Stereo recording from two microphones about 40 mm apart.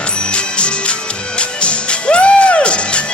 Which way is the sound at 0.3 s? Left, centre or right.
Left.